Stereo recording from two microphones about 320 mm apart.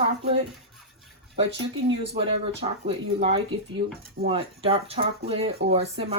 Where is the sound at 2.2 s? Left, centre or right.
Centre.